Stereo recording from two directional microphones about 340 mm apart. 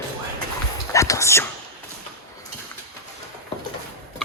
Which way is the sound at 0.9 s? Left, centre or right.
Centre.